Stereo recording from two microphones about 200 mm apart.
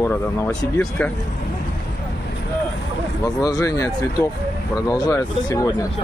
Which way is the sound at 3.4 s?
15° left (ahead or behind).